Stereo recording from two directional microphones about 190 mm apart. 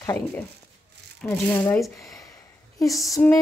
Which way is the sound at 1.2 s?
15° left (ahead or behind).